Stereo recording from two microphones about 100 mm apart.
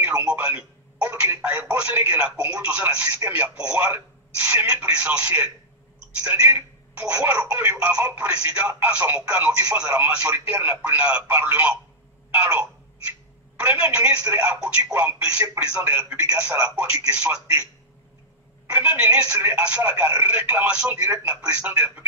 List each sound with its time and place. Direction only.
0.2 s speech: 10° right (ahead or behind)
18.7 s speech: 15° right (ahead or behind)